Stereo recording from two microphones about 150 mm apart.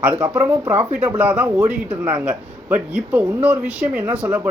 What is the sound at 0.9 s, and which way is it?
Speech, 10° right (ahead or behind).